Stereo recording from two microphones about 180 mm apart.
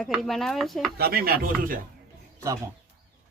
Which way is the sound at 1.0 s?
60° right (ahead or behind).